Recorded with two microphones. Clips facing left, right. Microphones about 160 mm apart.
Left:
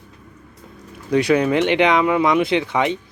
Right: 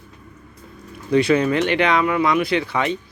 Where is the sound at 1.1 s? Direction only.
10° left (ahead or behind).